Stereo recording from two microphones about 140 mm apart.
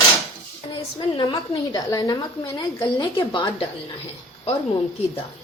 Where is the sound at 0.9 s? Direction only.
35° left (ahead or behind).